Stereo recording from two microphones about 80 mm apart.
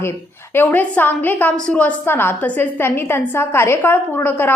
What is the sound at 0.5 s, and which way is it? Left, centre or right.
A woman's voice, left.